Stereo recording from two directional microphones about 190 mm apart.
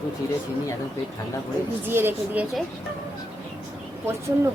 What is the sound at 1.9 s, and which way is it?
Speech, 10° right (ahead or behind).